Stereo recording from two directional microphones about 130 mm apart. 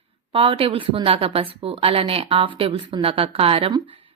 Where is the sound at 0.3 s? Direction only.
45° right (ahead or behind).